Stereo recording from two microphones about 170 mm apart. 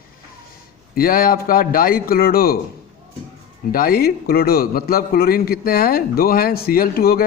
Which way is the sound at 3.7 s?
60° left (ahead or behind).